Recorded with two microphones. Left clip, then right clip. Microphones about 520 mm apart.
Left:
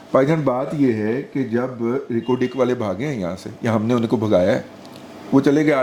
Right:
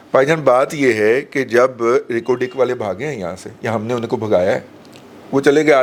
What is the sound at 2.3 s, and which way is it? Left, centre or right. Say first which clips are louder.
A man's voice: right 1 dB; right.